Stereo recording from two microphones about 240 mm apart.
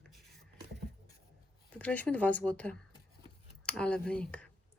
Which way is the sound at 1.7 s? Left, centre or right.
Centre.